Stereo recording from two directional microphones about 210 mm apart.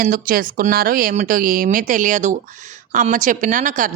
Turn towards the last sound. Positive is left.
turn(degrees=-40)  # may be behind; listen again after turning